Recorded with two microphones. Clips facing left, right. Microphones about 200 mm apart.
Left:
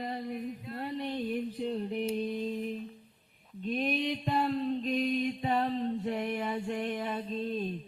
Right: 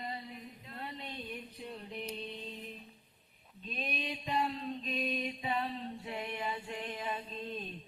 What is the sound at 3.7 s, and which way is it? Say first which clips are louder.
Mantra: left 9 dB; 60° left (ahead or behind).